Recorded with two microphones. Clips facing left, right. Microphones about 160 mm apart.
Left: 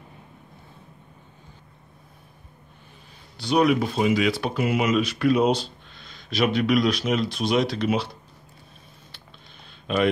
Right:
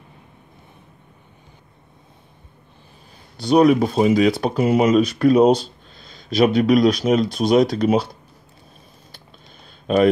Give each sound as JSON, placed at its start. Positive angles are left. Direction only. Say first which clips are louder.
{"t": 3.4, "sound": "speech", "louder": "right 6 dB", "side_deg": -40}
{"t": 9.9, "sound": "speech", "louder": "right 7 dB", "side_deg": -40}